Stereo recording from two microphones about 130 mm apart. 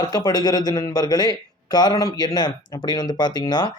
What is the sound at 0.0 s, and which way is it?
A man's voice, 30° left (ahead or behind).